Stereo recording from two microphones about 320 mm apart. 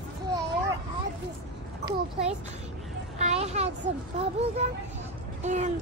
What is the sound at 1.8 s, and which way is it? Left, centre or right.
A child's voice, centre.